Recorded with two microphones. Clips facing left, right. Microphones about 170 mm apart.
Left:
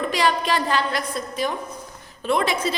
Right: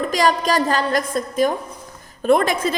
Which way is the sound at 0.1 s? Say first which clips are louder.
Right 4 dB; 40° right (ahead or behind).